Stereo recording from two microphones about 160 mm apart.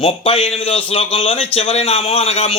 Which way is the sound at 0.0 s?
40° left (ahead or behind).